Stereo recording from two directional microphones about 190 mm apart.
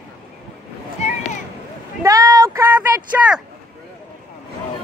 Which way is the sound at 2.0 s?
20° right (ahead or behind).